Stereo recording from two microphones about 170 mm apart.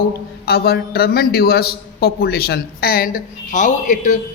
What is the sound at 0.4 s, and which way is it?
A man's voice, 65° left (ahead or behind).